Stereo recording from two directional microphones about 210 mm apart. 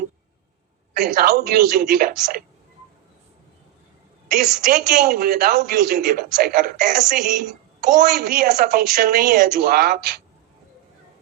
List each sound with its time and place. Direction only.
0.9 s a woman's voice: 45° right (ahead or behind)
4.3 s a woman's voice: 45° right (ahead or behind)